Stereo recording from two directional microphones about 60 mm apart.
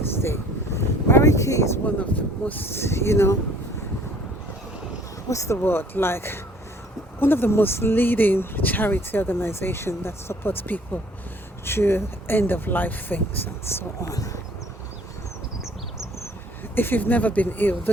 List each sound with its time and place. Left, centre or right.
0.2 s a sound: left
1.2 s speech: left
2.0 s speech: left
2.7 s speech: left
5.3 s speech: left
5.6 s speech: left
16.7 s speech: left